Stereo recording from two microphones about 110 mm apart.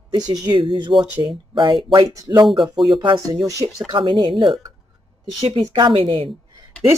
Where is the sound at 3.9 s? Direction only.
45° right (ahead or behind).